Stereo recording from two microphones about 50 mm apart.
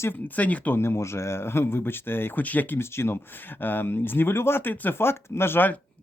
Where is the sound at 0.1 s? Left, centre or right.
Left.